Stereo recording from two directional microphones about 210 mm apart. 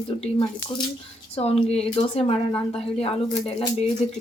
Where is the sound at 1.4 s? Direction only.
30° left (ahead or behind).